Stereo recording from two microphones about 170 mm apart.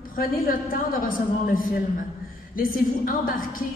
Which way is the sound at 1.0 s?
55° left (ahead or behind).